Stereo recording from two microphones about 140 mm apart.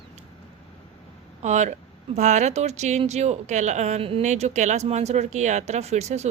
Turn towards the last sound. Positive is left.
turn(degrees=-55)  # may be behind; listen again after turning